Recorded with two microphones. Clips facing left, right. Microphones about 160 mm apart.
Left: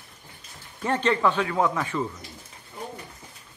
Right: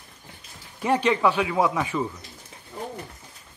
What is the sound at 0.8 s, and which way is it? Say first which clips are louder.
A man's voice: right 2 dB; 10° right (ahead or behind).